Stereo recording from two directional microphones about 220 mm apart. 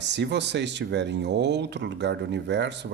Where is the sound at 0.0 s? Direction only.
50° right (ahead or behind).